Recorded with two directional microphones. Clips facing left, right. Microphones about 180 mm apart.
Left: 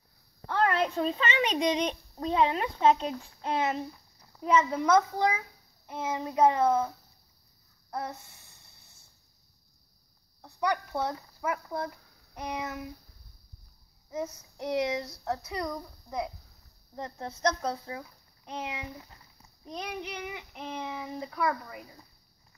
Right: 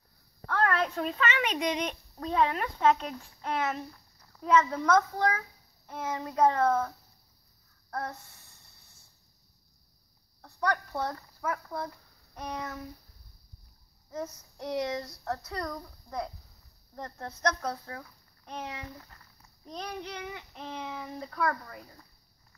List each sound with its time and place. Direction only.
0.5 s a child's voice: 25° left (ahead or behind); by 6.8 s 10° left (ahead or behind)
7.9 s a sound: 5° left (ahead or behind)
10.4 s a child's voice: 5° left (ahead or behind)
14.2 s a child's voice: 5° left (ahead or behind)